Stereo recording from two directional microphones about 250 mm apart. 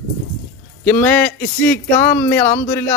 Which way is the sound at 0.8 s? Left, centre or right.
Centre.